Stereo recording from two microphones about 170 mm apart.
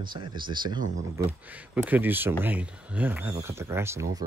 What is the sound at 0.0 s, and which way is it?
Speech, 25° right (ahead or behind).